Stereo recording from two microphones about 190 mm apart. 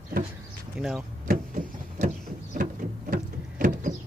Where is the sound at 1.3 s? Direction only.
45° right (ahead or behind).